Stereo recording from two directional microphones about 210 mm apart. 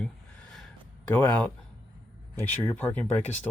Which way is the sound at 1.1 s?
10° left (ahead or behind).